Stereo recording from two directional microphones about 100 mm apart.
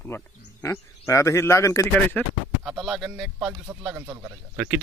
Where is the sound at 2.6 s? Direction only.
Centre (ahead or behind).